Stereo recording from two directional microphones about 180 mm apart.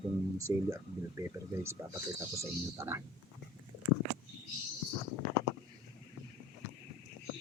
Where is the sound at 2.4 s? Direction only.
15° right (ahead or behind).